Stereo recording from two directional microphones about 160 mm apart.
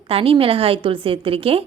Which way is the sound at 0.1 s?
35° right (ahead or behind).